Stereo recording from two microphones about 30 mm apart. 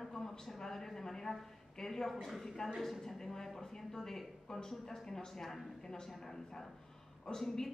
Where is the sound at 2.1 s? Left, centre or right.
Centre.